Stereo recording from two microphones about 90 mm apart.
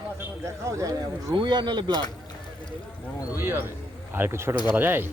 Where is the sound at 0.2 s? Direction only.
35° right (ahead or behind).